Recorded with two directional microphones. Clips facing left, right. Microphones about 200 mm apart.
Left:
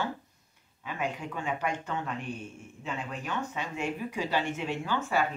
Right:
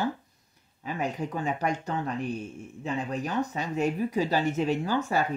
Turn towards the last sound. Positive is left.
turn(degrees=-40)  # may be behind; listen again after turning